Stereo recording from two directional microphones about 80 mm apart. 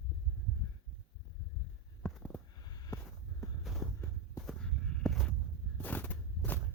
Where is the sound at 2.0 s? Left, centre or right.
Centre.